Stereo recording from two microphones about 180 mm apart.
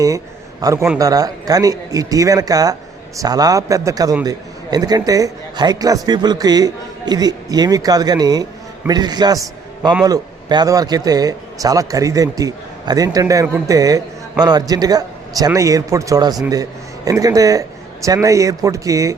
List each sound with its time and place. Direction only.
0.6 s a man's voice: 15° right (ahead or behind)